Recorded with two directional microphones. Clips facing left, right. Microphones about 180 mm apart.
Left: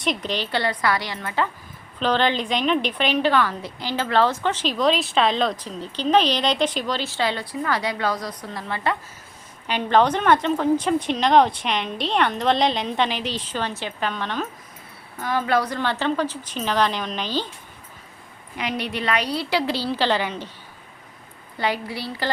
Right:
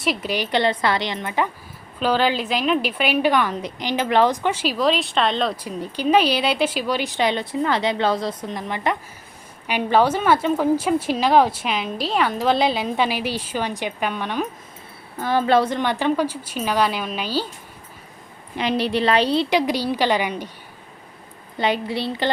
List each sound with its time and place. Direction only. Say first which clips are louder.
0.0 s a woman's voice: right 2 dB; 5° right (ahead or behind)
2.0 s a woman's voice: right 1 dB; 5° right (ahead or behind)
15.2 s a woman's voice: right 4 dB; 30° right (ahead or behind); by 17.5 s 10° right (ahead or behind)
18.5 s a woman's voice: right 6 dB; 30° right (ahead or behind); by 20.5 s 15° right (ahead or behind)
21.6 s a woman's voice: right 4 dB; 20° right (ahead or behind)